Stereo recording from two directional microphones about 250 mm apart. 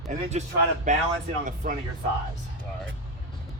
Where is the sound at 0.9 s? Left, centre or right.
Right.